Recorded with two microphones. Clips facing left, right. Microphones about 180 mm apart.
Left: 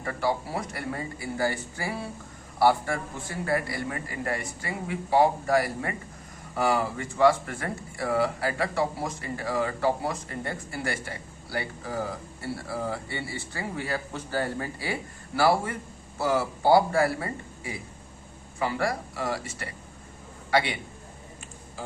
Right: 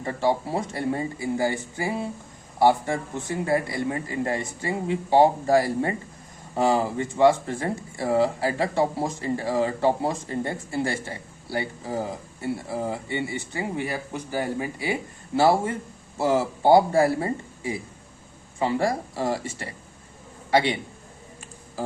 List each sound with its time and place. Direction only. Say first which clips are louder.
0.0 s a man's voice: right 4 dB; 25° right (ahead or behind)